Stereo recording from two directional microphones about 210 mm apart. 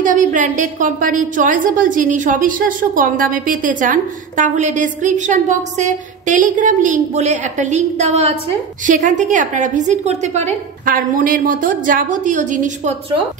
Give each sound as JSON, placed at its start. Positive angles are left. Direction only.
{"t": 0.0, "sound": "a woman's voice", "side_deg": -40}